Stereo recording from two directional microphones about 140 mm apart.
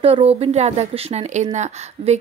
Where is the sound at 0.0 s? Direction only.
45° right (ahead or behind).